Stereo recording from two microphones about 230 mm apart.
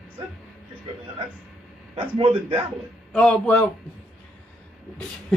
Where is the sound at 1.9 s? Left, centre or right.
Right.